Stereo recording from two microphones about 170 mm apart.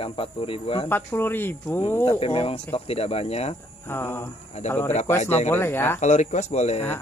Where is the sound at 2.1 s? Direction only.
35° left (ahead or behind).